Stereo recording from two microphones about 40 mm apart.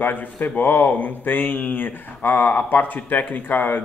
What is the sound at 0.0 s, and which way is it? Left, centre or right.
Speech, left.